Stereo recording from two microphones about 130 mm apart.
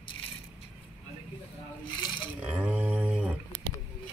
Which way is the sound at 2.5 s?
10° right (ahead or behind).